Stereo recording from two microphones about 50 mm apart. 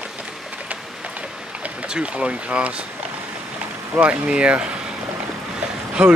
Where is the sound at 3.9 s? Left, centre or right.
Right.